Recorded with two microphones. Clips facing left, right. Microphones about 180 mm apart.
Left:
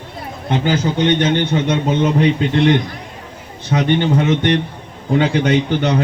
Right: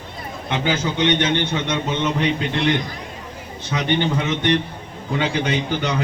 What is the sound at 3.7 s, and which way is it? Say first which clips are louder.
A man's voice: left 5 dB; 50° left (ahead or behind).